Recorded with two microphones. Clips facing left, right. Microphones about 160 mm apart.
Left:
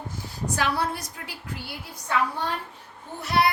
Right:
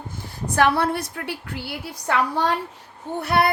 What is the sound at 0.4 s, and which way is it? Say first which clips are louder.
Speech: right 7 dB; 55° right (ahead or behind).